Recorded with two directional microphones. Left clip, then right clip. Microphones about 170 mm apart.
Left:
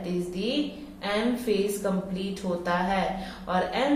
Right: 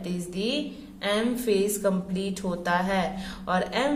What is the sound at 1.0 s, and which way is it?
Speech, 40° right (ahead or behind).